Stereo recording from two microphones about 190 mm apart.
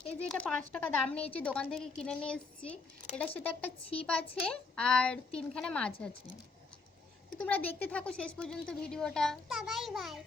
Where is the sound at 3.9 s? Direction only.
30° left (ahead or behind).